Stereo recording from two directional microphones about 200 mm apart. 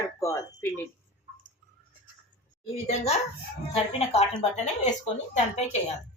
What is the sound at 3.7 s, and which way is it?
Speech, 30° left (ahead or behind).